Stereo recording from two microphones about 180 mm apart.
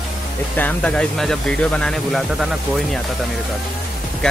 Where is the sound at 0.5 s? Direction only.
10° left (ahead or behind).